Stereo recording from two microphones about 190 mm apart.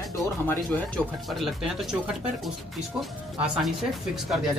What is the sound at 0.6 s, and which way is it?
Speech, 5° left (ahead or behind).